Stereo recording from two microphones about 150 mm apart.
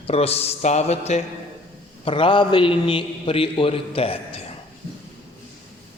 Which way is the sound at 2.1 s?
35° left (ahead or behind).